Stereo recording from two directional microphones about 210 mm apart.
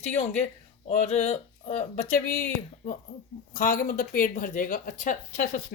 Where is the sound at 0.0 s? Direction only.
30° left (ahead or behind).